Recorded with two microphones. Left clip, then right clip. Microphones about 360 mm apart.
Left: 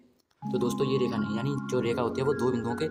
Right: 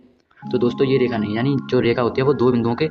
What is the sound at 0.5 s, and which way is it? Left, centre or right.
Speech, left.